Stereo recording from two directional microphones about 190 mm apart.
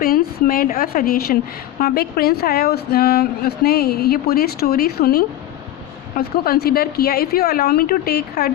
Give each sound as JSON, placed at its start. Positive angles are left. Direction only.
{"t": 0.0, "sound": "a woman's voice", "side_deg": 50}